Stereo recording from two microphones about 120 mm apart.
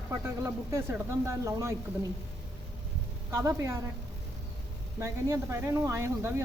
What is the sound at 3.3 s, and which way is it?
Speech, 25° right (ahead or behind).